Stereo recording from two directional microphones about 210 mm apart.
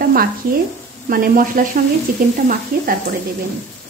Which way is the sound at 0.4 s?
40° right (ahead or behind).